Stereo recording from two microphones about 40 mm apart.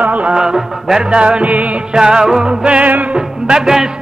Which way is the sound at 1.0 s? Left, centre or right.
Right.